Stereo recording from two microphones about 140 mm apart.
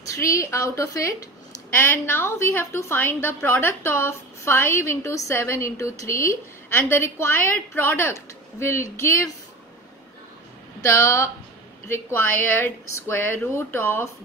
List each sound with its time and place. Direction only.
0.1 s a woman's voice: 20° left (ahead or behind)
10.8 s a woman's voice: 20° left (ahead or behind)